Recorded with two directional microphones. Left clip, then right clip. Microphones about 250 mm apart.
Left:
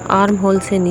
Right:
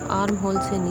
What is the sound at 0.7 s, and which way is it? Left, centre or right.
Speech, left.